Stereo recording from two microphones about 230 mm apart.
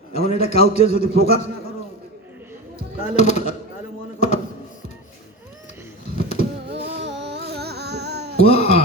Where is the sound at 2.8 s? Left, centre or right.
Left.